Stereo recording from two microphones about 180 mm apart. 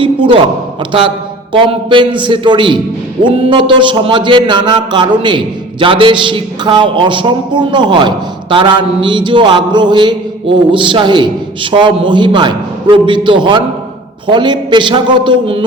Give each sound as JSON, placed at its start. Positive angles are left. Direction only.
{"t": 0.0, "sound": "a man's voice", "side_deg": -30}
{"t": 1.5, "sound": "a man's voice", "side_deg": -30}